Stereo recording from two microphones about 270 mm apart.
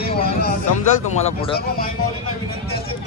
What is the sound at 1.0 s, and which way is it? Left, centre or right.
Speech, left.